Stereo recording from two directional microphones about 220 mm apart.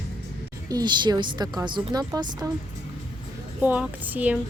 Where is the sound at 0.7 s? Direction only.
20° right (ahead or behind).